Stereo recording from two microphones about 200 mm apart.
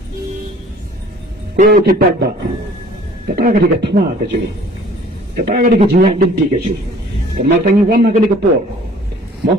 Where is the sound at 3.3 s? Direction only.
45° right (ahead or behind).